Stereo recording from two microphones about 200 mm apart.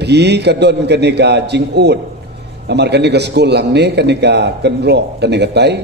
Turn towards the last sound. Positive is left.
turn(degrees=-55)  # may be behind; listen again after turning